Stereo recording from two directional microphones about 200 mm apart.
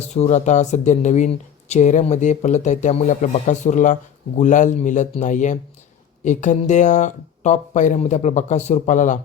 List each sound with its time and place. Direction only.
0.1 s speech: 35° left (ahead or behind)